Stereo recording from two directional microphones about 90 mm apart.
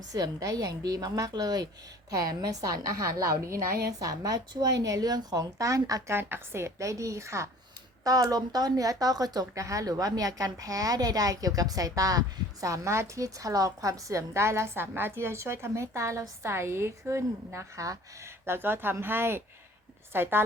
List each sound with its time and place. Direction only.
0.1 s a woman's voice: 40° right (ahead or behind)
6.1 s a woman's voice: 25° right (ahead or behind)